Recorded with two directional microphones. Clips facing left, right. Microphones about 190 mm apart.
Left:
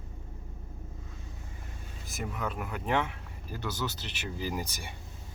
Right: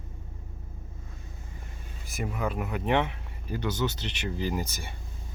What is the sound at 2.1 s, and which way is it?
Speech, 10° right (ahead or behind).